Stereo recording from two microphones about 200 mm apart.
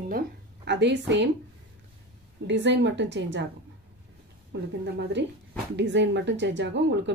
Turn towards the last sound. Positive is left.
turn(degrees=-60)  # may be behind; listen again after turning